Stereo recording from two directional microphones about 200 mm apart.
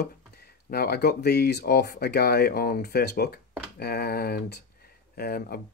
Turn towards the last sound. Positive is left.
turn(degrees=50)  # may be behind; listen again after turning